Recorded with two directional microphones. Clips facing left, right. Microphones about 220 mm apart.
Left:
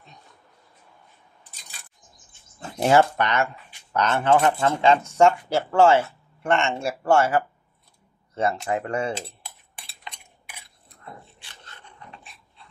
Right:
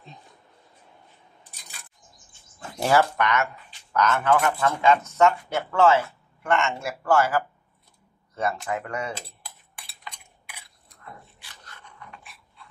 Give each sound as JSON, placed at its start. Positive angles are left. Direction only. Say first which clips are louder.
{"t": 2.6, "sound": "speech", "louder": "left 3 dB", "side_deg": 25}
{"t": 11.1, "sound": "dog", "louder": "left 2 dB", "side_deg": 25}